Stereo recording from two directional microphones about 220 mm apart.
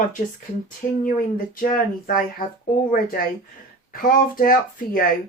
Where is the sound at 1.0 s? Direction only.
40° left (ahead or behind).